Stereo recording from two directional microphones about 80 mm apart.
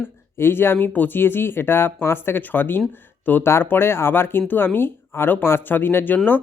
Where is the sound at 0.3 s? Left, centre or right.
Left.